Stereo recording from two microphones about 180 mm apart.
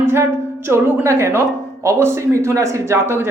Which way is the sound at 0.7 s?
10° right (ahead or behind).